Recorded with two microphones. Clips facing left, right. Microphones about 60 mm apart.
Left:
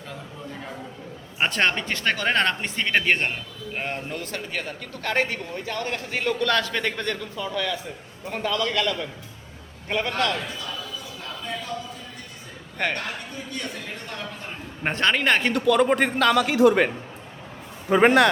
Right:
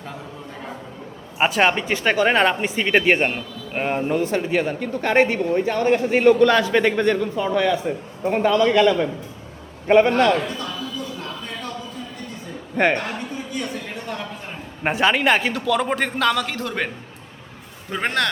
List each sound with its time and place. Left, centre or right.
1.4 s a man's voice: centre
7.5 s a man's voice: right
12.7 s a man's voice: right
13.5 s a sound: centre
14.8 s a man's voice: centre